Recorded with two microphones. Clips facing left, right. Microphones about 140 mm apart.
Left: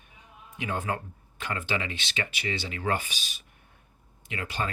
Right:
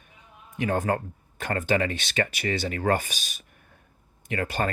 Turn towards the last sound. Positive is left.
turn(degrees=-50)  # may be behind; listen again after turning